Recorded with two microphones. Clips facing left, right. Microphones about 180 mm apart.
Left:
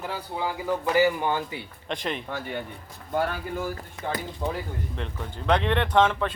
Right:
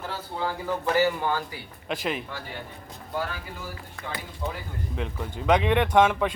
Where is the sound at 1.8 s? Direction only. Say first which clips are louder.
Right 2 dB; 5° right (ahead or behind).